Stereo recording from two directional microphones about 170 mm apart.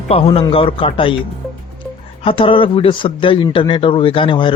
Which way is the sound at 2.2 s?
30° left (ahead or behind).